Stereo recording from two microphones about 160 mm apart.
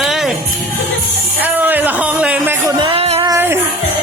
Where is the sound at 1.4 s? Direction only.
10° right (ahead or behind).